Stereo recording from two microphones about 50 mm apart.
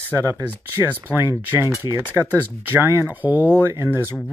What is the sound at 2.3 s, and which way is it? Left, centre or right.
Speech, right.